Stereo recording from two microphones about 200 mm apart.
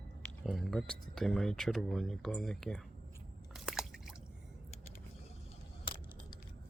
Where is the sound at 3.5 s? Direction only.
Centre (ahead or behind).